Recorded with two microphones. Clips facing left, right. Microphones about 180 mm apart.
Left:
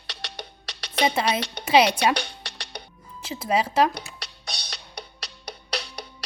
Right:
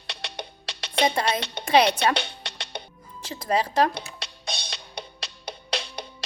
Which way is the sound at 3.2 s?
5° left (ahead or behind).